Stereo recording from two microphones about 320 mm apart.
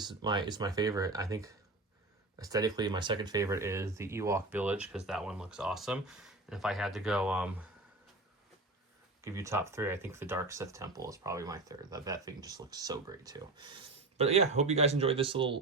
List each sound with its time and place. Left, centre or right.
0.0 s speech: centre
9.2 s speech: centre